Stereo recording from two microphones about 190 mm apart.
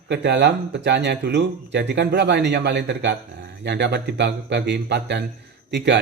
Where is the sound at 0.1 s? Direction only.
65° right (ahead or behind).